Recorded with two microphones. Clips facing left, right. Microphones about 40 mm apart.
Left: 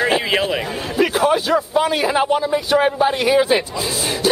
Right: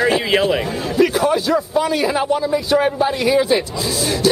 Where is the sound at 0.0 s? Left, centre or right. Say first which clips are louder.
Right 2 dB; centre.